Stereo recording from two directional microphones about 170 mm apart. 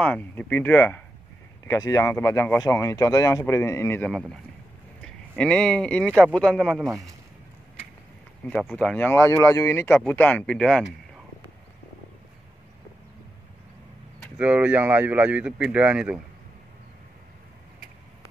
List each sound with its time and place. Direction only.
0.0 s speech: 10° left (ahead or behind)
4.1 s speech: centre (ahead or behind)
6.8 s speech: 20° right (ahead or behind)
8.5 s speech: 5° left (ahead or behind)
14.4 s speech: 10° right (ahead or behind)